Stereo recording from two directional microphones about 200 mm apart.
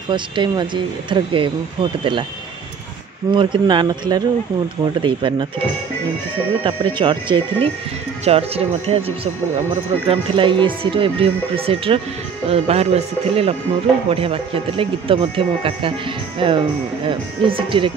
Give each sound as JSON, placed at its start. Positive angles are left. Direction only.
{"t": 0.1, "sound": "speech", "side_deg": -25}
{"t": 3.3, "sound": "speech", "side_deg": -25}
{"t": 6.6, "sound": "speech", "side_deg": -25}